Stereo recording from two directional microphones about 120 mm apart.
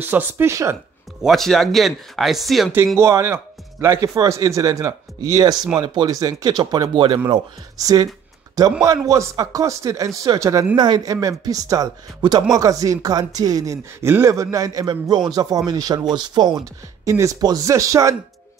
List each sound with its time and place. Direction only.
0.0 s speech: 15° right (ahead or behind)
1.2 s speech: centre (ahead or behind)
3.0 s speech: 25° right (ahead or behind)